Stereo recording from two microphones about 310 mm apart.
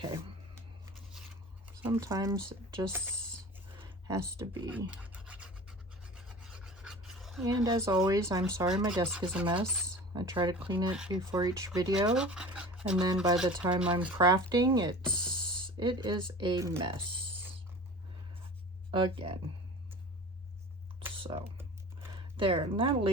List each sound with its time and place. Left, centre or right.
1.6 s speech: centre
3.8 s scratch: centre
7.6 s speech: centre
10.9 s speech: centre
11.3 s speech: centre
18.9 s speech: centre
21.0 s computer keyboard: centre
22.1 s speech: centre